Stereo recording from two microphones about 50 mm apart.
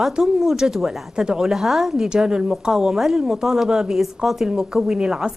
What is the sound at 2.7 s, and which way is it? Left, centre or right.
A woman's voice, centre.